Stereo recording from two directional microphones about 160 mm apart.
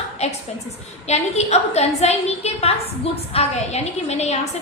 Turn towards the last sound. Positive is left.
turn(degrees=45)  # may be behind; listen again after turning